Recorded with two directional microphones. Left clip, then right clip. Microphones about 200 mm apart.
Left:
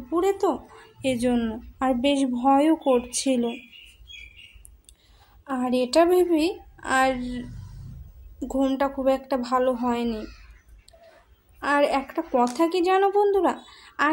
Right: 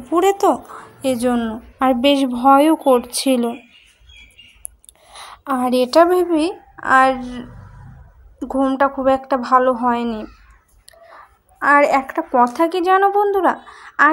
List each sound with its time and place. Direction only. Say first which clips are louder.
0.1 s speech: right 8 dB; 25° right (ahead or behind)
1.0 s a woman's voice: right 6 dB; 15° right (ahead or behind)
5.1 s a woman's voice: right 10 dB; 25° right (ahead or behind)
8.5 s a woman's voice: right 7 dB; 10° right (ahead or behind)
11.6 s a woman's voice: right 9 dB; 20° right (ahead or behind)